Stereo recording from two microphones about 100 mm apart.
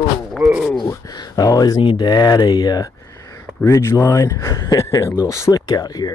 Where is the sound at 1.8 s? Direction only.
55° left (ahead or behind).